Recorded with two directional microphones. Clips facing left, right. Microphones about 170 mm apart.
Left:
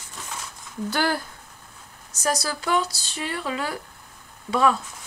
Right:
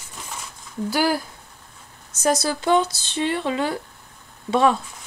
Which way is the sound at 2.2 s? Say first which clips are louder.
Right 5 dB; 25° right (ahead or behind).